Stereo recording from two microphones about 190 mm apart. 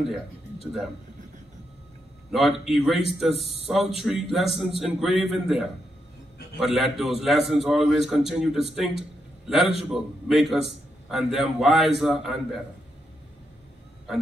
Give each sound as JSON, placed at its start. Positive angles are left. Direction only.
{"t": 2.3, "sound": "a man's voice", "side_deg": 0}
{"t": 3.3, "sound": "speech", "side_deg": 30}
{"t": 3.7, "sound": "a man's voice", "side_deg": 0}